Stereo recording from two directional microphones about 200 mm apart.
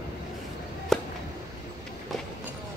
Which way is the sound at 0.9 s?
Centre (ahead or behind).